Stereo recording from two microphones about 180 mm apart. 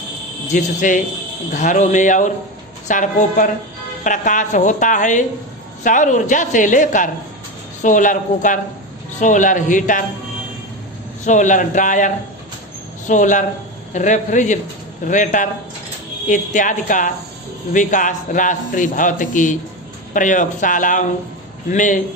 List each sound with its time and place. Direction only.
0.5 s a man's voice: 45° left (ahead or behind)
11.3 s a man's voice: 45° left (ahead or behind)